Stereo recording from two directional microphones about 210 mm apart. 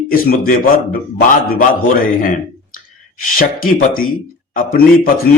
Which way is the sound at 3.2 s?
40° left (ahead or behind).